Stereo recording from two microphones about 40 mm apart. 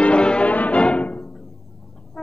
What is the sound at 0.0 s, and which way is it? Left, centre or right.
Music, left.